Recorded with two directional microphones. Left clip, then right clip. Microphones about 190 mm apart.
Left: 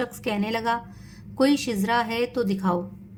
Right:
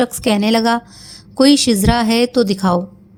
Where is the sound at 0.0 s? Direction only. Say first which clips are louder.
Right 11 dB; 35° right (ahead or behind).